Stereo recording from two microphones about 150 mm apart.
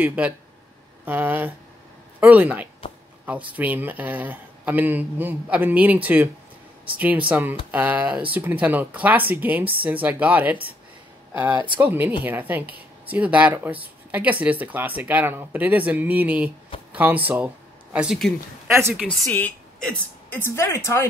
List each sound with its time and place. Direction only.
0.0 s speech: 10° right (ahead or behind)
7.0 s speech: 10° right (ahead or behind)
11.5 s speech: 30° right (ahead or behind)
11.8 s speech: 15° right (ahead or behind)
18.7 s speech: 15° right (ahead or behind)
19.0 s a woman's voice: 10° left (ahead or behind)